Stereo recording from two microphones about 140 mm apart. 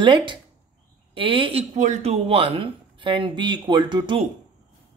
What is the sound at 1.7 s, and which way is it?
Speech, 55° right (ahead or behind).